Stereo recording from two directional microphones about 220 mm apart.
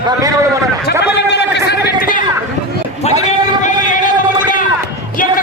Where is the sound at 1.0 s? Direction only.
50° left (ahead or behind).